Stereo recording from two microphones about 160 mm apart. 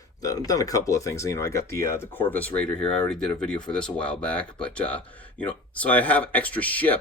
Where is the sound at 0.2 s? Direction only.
20° left (ahead or behind).